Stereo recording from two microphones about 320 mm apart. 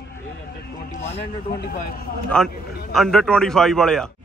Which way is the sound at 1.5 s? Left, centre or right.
Left.